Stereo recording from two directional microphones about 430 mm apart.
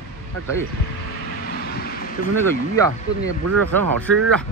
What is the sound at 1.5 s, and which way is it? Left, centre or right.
Vehicle, left.